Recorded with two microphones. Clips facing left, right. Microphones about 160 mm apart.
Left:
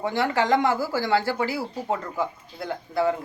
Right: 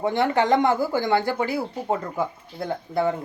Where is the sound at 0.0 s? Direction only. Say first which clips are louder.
Right 3 dB; 20° right (ahead or behind).